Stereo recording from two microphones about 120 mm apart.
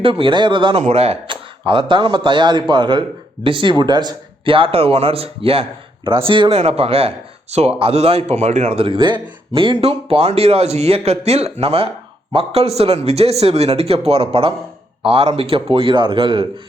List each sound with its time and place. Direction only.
0.0 s speech: 45° right (ahead or behind)
0.8 s speech: 65° right (ahead or behind); by 9.3 s 40° right (ahead or behind)
9.5 s speech: 50° right (ahead or behind)